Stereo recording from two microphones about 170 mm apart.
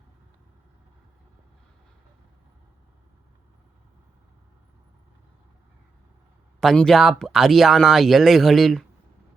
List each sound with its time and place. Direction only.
6.6 s speech: centre (ahead or behind)